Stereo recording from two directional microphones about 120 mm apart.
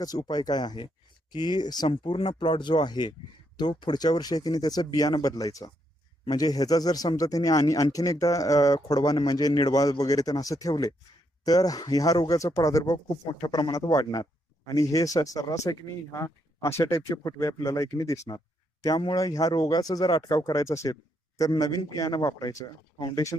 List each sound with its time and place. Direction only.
0.0 s speech: 30° left (ahead or behind)
1.9 s speech: 45° left (ahead or behind)